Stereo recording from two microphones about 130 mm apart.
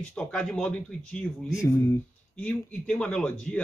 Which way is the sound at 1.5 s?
20° left (ahead or behind).